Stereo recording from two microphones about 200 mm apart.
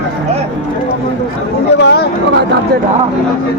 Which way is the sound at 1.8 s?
55° left (ahead or behind).